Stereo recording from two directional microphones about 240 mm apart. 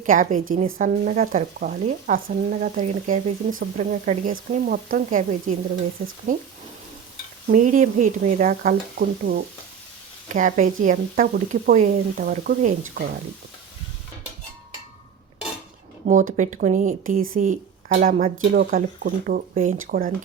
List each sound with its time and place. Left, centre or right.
0.0 s speech: right
7.4 s speech: right
16.0 s a woman's voice: right